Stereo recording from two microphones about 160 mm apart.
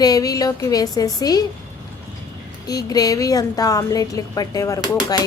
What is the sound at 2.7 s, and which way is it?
A woman's voice, 20° left (ahead or behind).